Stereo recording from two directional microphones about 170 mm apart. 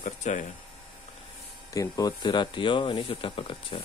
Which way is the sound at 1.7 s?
20° left (ahead or behind).